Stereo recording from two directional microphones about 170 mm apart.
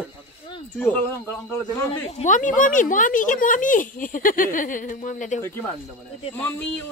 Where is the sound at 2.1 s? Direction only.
50° left (ahead or behind).